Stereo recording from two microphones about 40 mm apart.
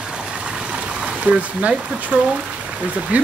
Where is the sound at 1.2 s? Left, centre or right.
Right.